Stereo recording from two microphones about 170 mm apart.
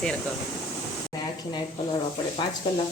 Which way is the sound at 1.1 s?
20° left (ahead or behind).